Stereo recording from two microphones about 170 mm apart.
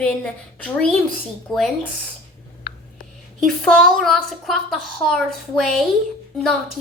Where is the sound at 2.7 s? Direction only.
65° left (ahead or behind).